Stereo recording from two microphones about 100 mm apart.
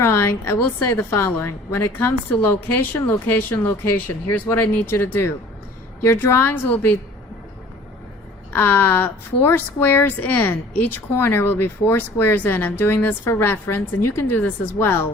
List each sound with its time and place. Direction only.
0.0 s speech: 25° left (ahead or behind)
8.5 s speech: 20° left (ahead or behind)